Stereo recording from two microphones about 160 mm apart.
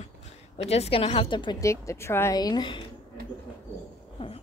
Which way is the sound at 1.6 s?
20° left (ahead or behind).